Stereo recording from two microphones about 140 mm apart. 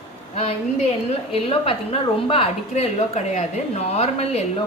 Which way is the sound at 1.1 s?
45° left (ahead or behind).